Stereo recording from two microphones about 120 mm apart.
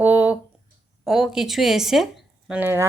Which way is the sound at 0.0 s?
15° right (ahead or behind).